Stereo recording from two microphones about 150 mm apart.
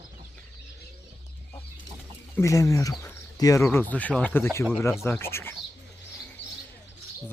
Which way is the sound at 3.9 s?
10° left (ahead or behind).